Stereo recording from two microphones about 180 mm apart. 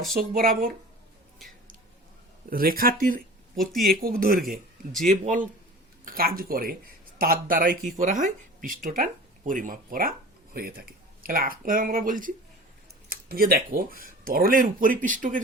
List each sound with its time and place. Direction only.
0.1 s speech: 55° right (ahead or behind)
2.5 s speech: 55° right (ahead or behind)
5.0 s speech: 45° right (ahead or behind)
6.1 s speech: 55° right (ahead or behind)